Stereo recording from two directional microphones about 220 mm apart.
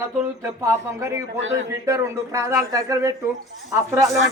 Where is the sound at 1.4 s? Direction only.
60° right (ahead or behind).